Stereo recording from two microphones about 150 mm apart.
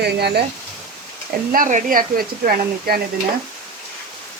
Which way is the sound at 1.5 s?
60° right (ahead or behind).